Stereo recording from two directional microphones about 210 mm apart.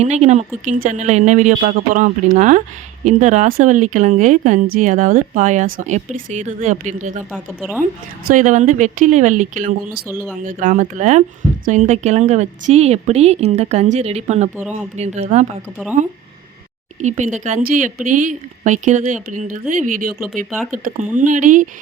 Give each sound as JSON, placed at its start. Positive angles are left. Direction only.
{"t": 0.0, "sound": "speech", "side_deg": -35}
{"t": 7.3, "sound": "a woman's voice", "side_deg": -5}
{"t": 8.3, "sound": "speech", "side_deg": -35}
{"t": 17.0, "sound": "speech", "side_deg": -35}